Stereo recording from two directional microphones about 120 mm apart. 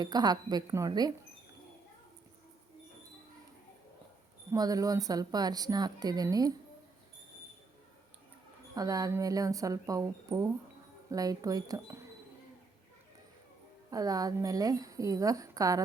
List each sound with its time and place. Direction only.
0.0 s a woman's voice: 35° right (ahead or behind)
4.5 s a woman's voice: 30° right (ahead or behind)
8.7 s a woman's voice: 30° right (ahead or behind)
13.9 s a woman's voice: 30° right (ahead or behind)